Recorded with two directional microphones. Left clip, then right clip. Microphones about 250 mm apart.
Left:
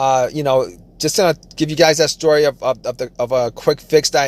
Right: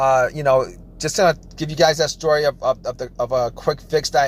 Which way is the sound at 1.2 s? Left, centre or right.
Left.